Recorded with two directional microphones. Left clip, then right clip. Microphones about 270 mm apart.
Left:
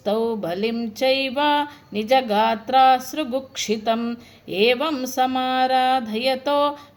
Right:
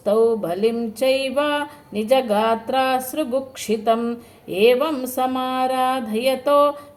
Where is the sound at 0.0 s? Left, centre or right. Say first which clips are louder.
Right 5 dB; left.